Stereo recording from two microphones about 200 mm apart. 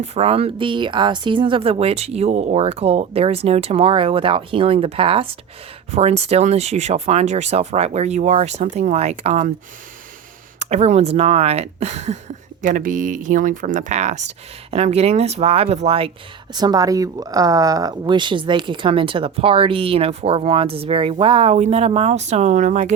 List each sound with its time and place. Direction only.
0.0 s speech: 30° right (ahead or behind)
10.6 s speech: 35° right (ahead or behind)